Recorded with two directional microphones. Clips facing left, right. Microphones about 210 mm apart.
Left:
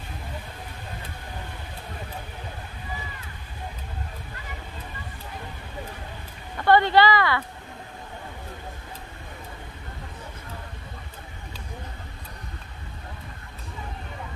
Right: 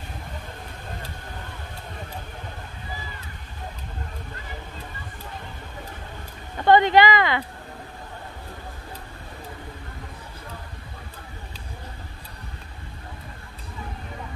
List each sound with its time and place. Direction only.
6.6 s speech: 20° right (ahead or behind)